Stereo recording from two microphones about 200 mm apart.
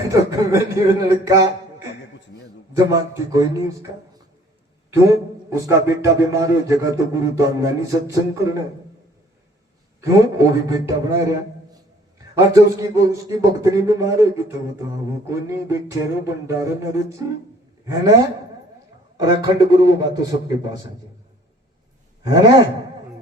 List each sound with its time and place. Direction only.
0.1 s a man's voice: 15° right (ahead or behind)
2.7 s a man's voice: 15° right (ahead or behind)
5.0 s a man's voice: 15° right (ahead or behind)
10.0 s a man's voice: 15° right (ahead or behind)
22.3 s a sound: 20° right (ahead or behind)